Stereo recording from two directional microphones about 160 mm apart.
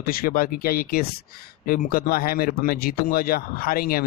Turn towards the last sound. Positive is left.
turn(degrees=65)  # may be behind; listen again after turning